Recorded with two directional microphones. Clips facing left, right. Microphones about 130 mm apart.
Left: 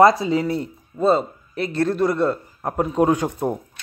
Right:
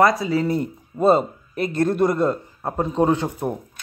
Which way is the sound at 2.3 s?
5° left (ahead or behind).